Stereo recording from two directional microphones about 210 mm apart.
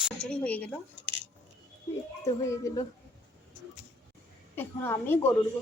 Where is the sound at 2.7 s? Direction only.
15° left (ahead or behind).